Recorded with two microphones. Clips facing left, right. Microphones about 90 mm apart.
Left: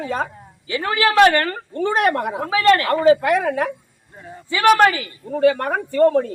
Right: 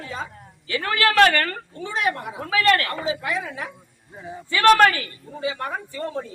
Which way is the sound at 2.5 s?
25° left (ahead or behind).